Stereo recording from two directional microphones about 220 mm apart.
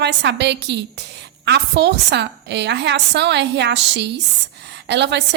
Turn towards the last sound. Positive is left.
turn(degrees=-50)  # may be behind; listen again after turning